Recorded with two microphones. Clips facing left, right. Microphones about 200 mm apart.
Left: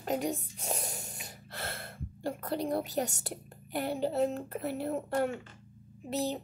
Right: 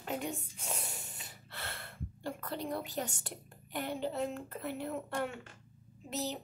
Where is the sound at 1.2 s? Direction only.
40° left (ahead or behind).